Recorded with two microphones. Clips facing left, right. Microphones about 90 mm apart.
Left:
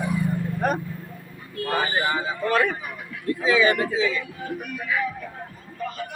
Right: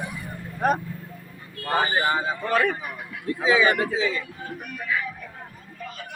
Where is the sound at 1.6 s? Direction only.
30° right (ahead or behind).